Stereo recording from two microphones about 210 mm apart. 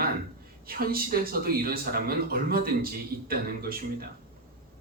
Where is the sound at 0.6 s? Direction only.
45° right (ahead or behind).